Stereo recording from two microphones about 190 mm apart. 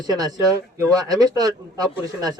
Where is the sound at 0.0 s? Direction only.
20° right (ahead or behind).